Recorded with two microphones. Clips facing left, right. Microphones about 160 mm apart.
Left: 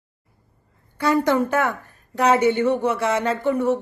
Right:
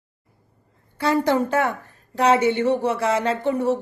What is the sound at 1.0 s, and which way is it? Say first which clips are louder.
Speech: left 1 dB; 30° right (ahead or behind).